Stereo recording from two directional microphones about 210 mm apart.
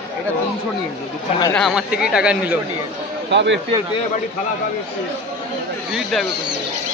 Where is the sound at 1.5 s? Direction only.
Centre (ahead or behind).